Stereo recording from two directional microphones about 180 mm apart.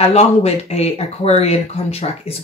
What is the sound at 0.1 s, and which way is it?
Speech, 35° left (ahead or behind).